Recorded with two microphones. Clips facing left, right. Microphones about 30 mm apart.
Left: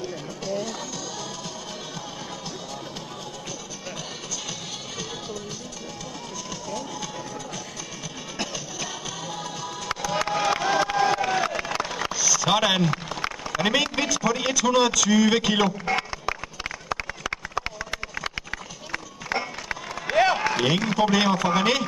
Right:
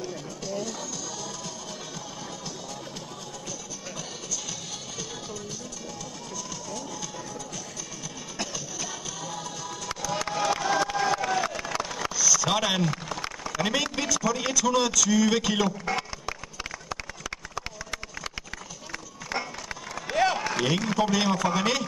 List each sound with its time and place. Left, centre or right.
0.0 s music: centre
9.3 s music: centre
18.9 s run: left